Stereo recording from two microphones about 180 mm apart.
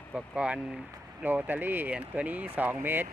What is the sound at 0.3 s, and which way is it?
Speech, 5° right (ahead or behind).